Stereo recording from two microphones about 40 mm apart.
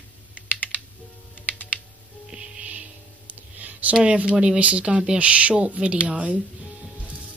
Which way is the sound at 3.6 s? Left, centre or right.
Right.